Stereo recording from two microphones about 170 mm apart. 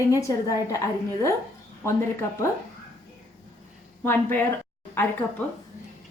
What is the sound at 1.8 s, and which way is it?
Speech, 15° left (ahead or behind).